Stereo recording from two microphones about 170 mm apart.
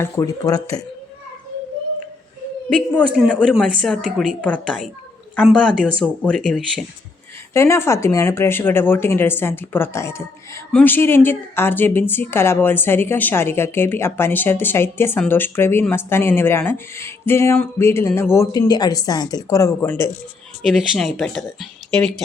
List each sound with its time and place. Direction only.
0.0 s speech: 20° left (ahead or behind)
3.2 s speech: 5° left (ahead or behind)
5.4 s speech: 5° right (ahead or behind)
7.5 s speech: 15° left (ahead or behind)
20.6 s speech: centre (ahead or behind)